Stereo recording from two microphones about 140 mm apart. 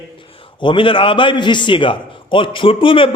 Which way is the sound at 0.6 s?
35° left (ahead or behind).